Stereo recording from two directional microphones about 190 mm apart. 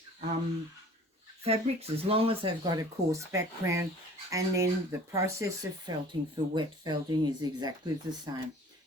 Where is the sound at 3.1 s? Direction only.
15° right (ahead or behind).